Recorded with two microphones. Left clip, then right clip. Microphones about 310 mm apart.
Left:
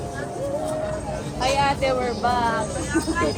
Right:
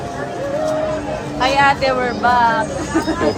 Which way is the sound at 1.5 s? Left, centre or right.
Right.